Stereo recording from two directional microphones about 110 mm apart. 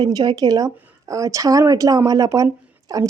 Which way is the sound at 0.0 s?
35° right (ahead or behind).